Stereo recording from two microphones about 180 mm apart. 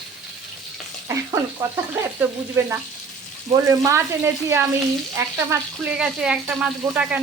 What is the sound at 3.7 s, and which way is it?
Speech, 15° right (ahead or behind).